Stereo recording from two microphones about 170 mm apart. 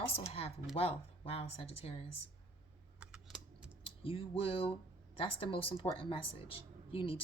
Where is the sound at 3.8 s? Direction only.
30° left (ahead or behind).